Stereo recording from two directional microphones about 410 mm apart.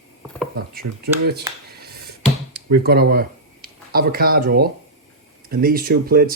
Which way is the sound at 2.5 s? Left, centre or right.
Right.